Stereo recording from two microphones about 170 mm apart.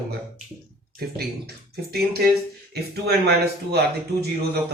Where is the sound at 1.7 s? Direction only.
65° right (ahead or behind).